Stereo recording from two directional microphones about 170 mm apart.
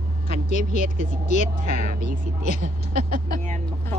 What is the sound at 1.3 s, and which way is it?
Speech, 45° left (ahead or behind).